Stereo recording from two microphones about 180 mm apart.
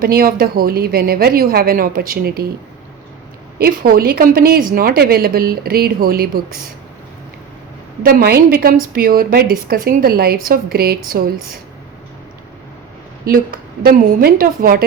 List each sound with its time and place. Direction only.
0.0 s a woman's voice: 55° right (ahead or behind)
3.6 s a woman's voice: 55° right (ahead or behind)
8.0 s a woman's voice: 60° right (ahead or behind)
13.2 s a woman's voice: 55° right (ahead or behind)